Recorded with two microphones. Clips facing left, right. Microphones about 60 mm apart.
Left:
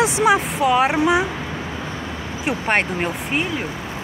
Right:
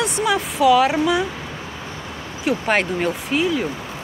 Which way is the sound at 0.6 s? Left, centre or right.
Left.